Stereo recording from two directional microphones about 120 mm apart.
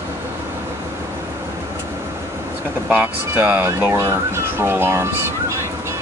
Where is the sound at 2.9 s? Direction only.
15° right (ahead or behind).